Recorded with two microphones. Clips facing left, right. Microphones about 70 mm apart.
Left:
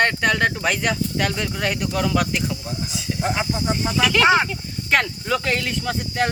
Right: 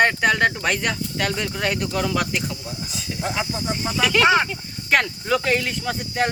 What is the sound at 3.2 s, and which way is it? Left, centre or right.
Speech, left.